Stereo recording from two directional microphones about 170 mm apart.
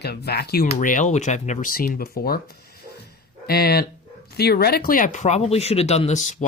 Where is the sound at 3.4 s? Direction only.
65° left (ahead or behind).